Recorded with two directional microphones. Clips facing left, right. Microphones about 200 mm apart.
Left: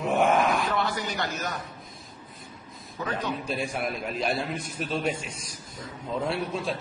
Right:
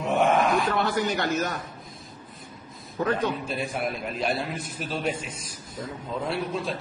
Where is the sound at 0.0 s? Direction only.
Centre (ahead or behind).